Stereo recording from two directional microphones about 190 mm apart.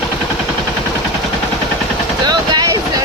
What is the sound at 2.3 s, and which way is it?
Vehicle, 20° right (ahead or behind).